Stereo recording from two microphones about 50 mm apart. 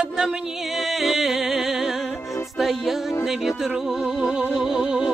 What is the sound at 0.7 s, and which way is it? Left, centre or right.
Music, centre.